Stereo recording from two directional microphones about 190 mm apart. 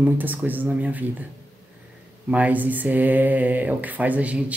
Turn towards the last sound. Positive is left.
turn(degrees=-5)  # may be behind; listen again after turning